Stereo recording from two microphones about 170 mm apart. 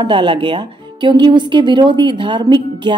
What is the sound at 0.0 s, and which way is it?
A woman's voice, 30° right (ahead or behind).